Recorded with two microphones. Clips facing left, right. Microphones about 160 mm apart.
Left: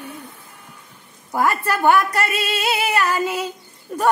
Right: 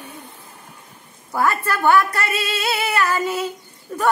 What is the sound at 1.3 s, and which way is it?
Music, 15° left (ahead or behind).